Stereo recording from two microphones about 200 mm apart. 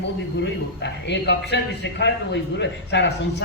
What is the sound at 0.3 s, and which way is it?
A man's voice, 60° left (ahead or behind).